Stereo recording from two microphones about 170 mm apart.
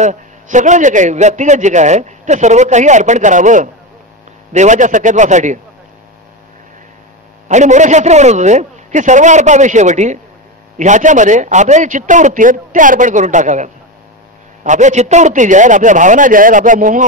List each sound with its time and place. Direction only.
0.0 s a man's voice: 45° right (ahead or behind)
7.4 s a man's voice: 45° right (ahead or behind)